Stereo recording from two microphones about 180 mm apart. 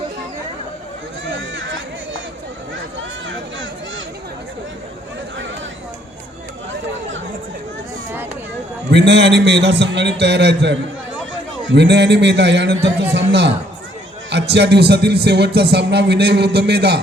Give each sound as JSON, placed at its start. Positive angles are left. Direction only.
{"t": 1.2, "sound": "run", "side_deg": -85}
{"t": 3.2, "sound": "a sound", "side_deg": -90}
{"t": 8.9, "sound": "a man's voice", "side_deg": -75}